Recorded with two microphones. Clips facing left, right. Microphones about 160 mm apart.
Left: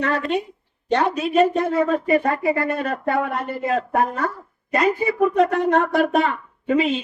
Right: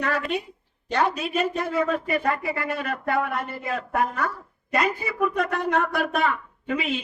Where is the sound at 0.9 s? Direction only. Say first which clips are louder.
Left 6 dB; 35° left (ahead or behind).